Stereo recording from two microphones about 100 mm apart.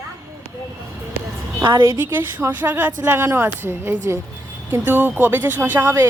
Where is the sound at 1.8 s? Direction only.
20° right (ahead or behind).